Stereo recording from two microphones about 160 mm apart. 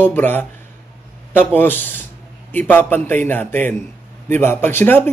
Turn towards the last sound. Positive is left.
turn(degrees=15)  # may be behind; listen again after turning